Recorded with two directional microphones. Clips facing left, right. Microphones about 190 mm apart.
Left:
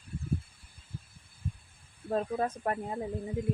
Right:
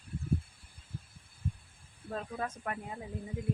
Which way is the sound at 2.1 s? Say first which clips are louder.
Left 7 dB; 35° left (ahead or behind).